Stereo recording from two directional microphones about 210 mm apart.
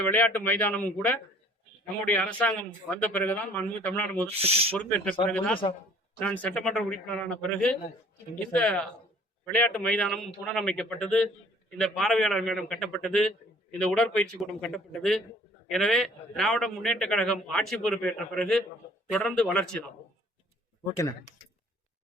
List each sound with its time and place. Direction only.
0.0 s speech: 10° left (ahead or behind)
4.4 s speech: 30° right (ahead or behind)
4.8 s speech: 5° left (ahead or behind)
5.6 s a man's voice: 30° left (ahead or behind)
6.1 s a man's voice: 5° left (ahead or behind)